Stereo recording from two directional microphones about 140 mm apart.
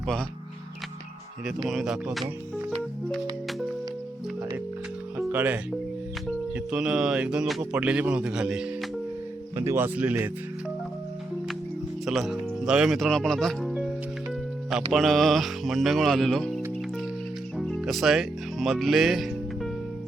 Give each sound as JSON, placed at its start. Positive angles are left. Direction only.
{"t": 1.6, "sound": "speech", "side_deg": -5}
{"t": 5.3, "sound": "speech", "side_deg": -15}
{"t": 9.6, "sound": "speech", "side_deg": -20}
{"t": 12.0, "sound": "speech", "side_deg": 0}
{"t": 14.9, "sound": "speech", "side_deg": 0}